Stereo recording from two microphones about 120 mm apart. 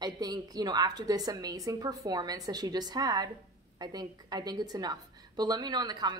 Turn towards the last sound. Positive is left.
turn(degrees=-35)  # may be behind; listen again after turning